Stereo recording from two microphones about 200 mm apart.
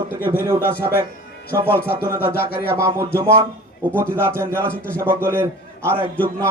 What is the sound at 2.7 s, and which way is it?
A man's voice, 15° right (ahead or behind).